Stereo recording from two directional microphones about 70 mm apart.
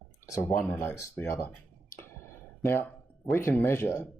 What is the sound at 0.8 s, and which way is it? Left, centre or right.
Speech, left.